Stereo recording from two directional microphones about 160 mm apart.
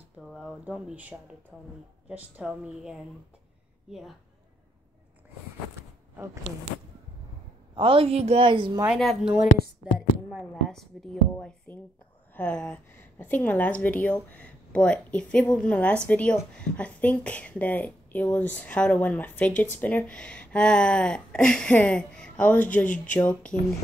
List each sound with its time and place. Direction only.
0.2 s a woman's voice: 5° right (ahead or behind)
6.1 s speech: 15° right (ahead or behind)
7.7 s a woman's voice: 35° right (ahead or behind)
8.8 s a woman's voice: centre (ahead or behind)
10.5 s a woman's voice: centre (ahead or behind)